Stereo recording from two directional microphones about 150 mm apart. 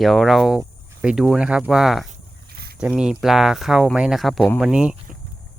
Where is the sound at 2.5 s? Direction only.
90° right.